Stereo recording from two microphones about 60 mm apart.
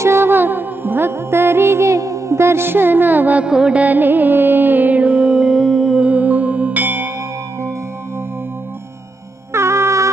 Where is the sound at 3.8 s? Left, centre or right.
Right; by 6.0 s centre.